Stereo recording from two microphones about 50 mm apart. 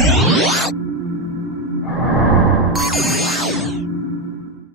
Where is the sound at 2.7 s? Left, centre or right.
Centre.